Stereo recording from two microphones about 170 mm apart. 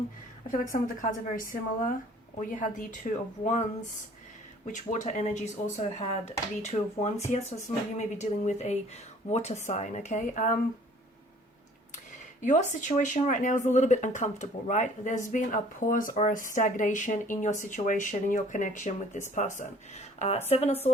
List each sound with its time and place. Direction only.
0.5 s speech: 50° left (ahead or behind)
4.6 s speech: 50° left (ahead or behind)
12.4 s speech: 45° left (ahead or behind)